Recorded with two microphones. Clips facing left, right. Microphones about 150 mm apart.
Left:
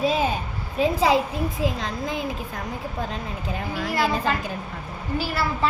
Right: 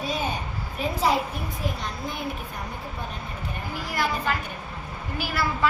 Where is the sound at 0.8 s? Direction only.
90° left.